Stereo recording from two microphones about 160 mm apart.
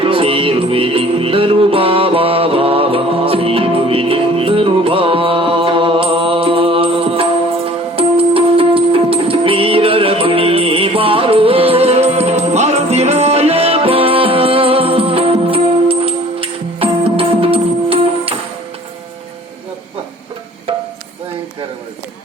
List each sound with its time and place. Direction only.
0.0 s music: 35° right (ahead or behind)